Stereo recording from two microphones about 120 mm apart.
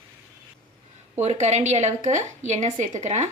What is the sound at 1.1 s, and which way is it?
A woman's voice, 70° right (ahead or behind).